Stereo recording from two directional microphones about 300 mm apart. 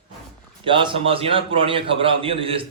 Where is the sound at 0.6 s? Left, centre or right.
Centre.